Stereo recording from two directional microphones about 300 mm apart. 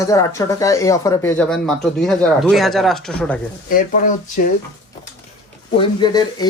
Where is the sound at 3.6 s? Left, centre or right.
Left.